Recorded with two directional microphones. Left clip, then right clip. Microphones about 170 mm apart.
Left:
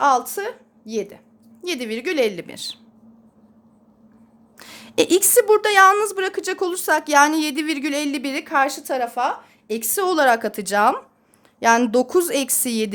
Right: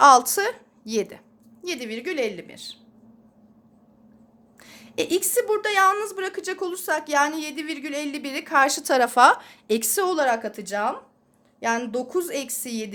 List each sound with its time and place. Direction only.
0.0 s a woman's voice: 5° right (ahead or behind)
1.6 s a woman's voice: 25° left (ahead or behind)
4.5 s a woman's voice: 35° left (ahead or behind)
8.5 s speech: 5° right (ahead or behind)
8.9 s speech: 25° right (ahead or behind)
9.6 s a woman's voice: 15° right (ahead or behind)
10.1 s a woman's voice: 30° left (ahead or behind)